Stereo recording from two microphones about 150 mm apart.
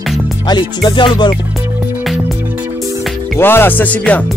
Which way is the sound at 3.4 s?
15° left (ahead or behind).